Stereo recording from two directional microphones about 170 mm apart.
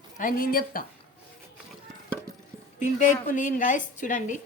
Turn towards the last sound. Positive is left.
turn(degrees=50)  # may be behind; listen again after turning